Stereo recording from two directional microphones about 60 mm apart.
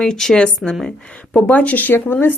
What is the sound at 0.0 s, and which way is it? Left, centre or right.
A woman's voice, centre.